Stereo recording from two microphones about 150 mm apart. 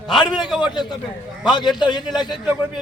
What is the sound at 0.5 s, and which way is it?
A man's voice, 30° left (ahead or behind).